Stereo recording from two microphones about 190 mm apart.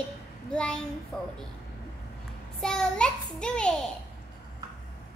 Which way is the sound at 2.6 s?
5° left (ahead or behind).